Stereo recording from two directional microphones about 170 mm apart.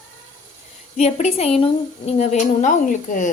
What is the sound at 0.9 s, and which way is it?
A woman's voice, 40° left (ahead or behind).